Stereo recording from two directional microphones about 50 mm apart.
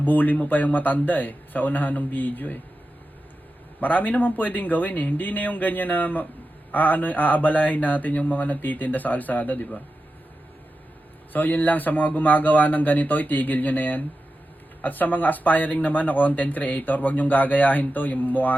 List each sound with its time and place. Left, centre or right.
0.0 s speech: left
3.8 s speech: left
11.3 s speech: left